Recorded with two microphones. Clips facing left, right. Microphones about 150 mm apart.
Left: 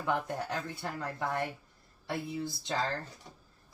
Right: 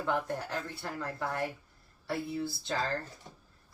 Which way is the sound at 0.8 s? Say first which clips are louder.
Even; 15° left (ahead or behind).